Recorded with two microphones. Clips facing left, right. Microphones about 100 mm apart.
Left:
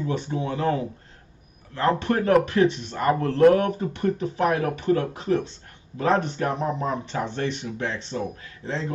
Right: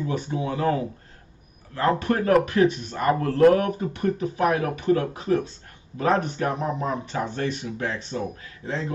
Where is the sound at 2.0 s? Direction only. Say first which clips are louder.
Left 1 dB; 25° left (ahead or behind).